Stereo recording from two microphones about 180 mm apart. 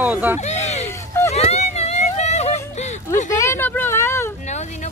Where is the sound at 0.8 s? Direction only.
15° left (ahead or behind).